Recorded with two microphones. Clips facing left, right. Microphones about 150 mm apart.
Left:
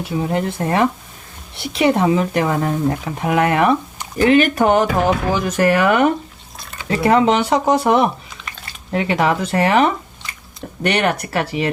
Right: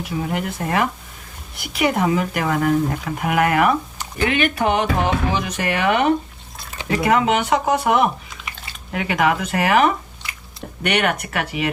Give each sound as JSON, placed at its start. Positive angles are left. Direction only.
{"t": 0.0, "sound": "speech", "side_deg": 30}
{"t": 4.2, "sound": "speech", "side_deg": 40}
{"t": 7.0, "sound": "speech", "side_deg": 30}
{"t": 10.8, "sound": "speech", "side_deg": 35}